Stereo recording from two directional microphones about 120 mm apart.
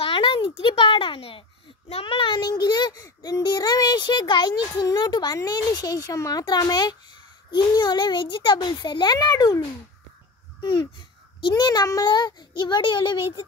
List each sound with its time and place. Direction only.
0.0 s a child's voice: 45° left (ahead or behind)
11.4 s a child's voice: 35° left (ahead or behind)